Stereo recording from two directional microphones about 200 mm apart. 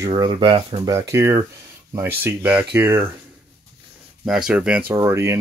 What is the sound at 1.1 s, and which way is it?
Speech, 15° right (ahead or behind).